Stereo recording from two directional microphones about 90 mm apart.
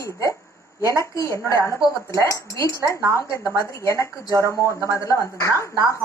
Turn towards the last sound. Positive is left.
turn(degrees=35)  # may be behind; listen again after turning